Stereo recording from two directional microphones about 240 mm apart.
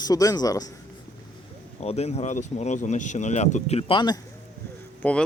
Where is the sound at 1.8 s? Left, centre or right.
Left.